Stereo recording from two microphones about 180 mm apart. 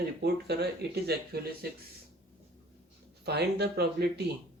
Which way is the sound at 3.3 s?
65° right (ahead or behind).